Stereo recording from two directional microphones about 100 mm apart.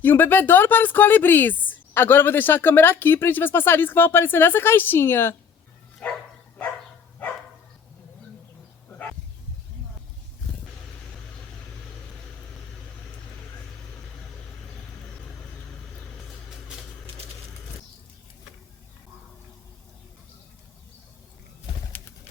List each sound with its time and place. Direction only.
0.0 s speech: 20° left (ahead or behind)
16.5 s vehicle: 5° right (ahead or behind)